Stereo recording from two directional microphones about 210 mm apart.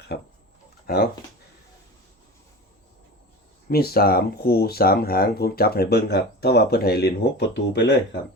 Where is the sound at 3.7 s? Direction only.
45° left (ahead or behind).